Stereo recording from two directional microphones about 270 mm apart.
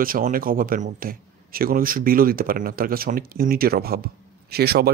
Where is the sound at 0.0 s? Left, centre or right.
Right.